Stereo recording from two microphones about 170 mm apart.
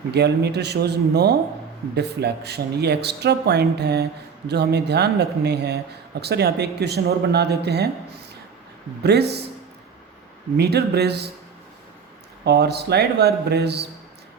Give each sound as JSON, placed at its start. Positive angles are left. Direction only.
{"t": 0.1, "sound": "speech", "side_deg": -75}
{"t": 10.6, "sound": "speech", "side_deg": -75}
{"t": 12.5, "sound": "speech", "side_deg": -75}